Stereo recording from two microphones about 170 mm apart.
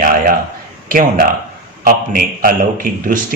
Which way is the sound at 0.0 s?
55° right (ahead or behind).